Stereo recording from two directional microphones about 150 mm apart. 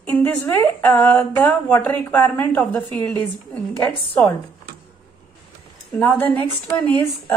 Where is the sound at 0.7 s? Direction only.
10° left (ahead or behind).